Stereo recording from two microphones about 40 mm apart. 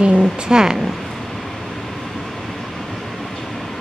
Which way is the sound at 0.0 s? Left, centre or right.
Right.